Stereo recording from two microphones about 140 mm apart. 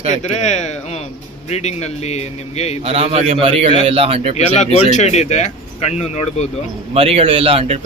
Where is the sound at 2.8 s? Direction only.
45° right (ahead or behind).